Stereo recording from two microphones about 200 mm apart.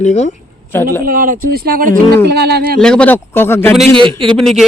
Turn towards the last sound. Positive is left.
turn(degrees=0)  # may be behind; listen again after turning